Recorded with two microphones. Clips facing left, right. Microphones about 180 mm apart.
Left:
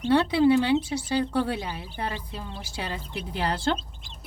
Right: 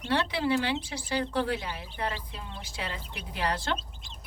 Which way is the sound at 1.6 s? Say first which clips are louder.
Left 2 dB; 30° left (ahead or behind).